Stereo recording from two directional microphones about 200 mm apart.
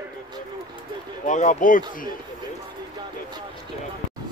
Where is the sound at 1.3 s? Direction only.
40° left (ahead or behind).